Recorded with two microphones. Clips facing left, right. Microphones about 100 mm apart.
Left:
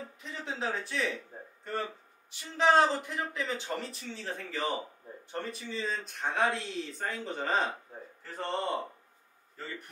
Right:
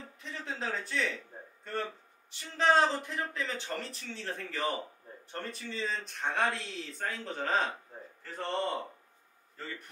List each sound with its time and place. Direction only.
0.2 s a man's voice: 10° left (ahead or behind)